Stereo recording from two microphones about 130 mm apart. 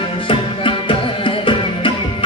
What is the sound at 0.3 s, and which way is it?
Music, 40° left (ahead or behind).